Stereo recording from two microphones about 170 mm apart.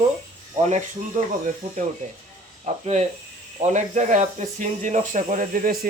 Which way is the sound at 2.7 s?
40° right (ahead or behind).